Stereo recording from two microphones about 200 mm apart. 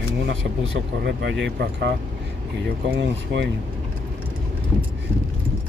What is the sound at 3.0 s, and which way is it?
Speech, 60° right (ahead or behind).